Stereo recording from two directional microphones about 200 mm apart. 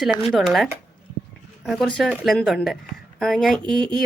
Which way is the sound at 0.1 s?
30° left (ahead or behind).